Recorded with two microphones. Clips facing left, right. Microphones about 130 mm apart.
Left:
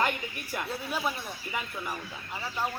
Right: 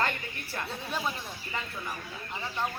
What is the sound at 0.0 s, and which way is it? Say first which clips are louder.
A man's voice: left 2 dB; 15° left (ahead or behind).